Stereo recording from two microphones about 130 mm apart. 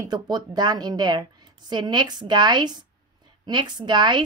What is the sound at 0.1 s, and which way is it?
A woman's voice, 35° right (ahead or behind).